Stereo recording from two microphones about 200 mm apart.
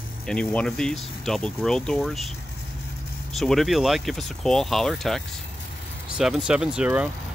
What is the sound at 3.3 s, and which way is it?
Speech, centre (ahead or behind).